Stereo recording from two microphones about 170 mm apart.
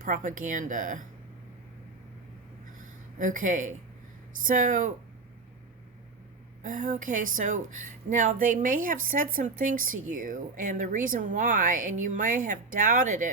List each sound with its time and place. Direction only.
0.0 s a woman's voice: 50° right (ahead or behind)
3.2 s a woman's voice: 50° right (ahead or behind)
6.6 s a woman's voice: 50° right (ahead or behind)